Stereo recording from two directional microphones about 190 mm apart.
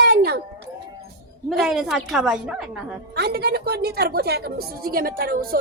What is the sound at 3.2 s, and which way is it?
A woman's voice, 60° right (ahead or behind).